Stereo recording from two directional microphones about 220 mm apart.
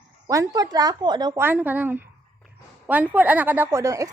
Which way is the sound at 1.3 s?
10° right (ahead or behind).